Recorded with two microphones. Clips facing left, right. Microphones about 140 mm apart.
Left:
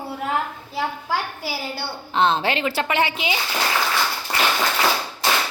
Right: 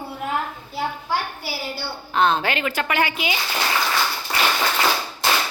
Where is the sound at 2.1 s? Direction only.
30° left (ahead or behind).